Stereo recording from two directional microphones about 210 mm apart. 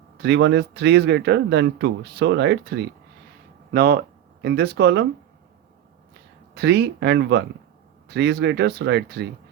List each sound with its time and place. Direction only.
0.2 s speech: 55° right (ahead or behind)
6.5 s speech: 55° right (ahead or behind)